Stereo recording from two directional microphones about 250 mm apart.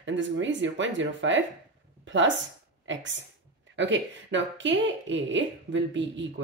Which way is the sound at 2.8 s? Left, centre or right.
Right.